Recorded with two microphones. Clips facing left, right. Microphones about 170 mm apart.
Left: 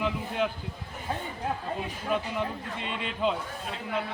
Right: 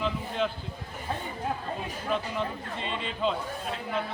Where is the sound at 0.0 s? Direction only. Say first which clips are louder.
Left 1 dB; 10° left (ahead or behind).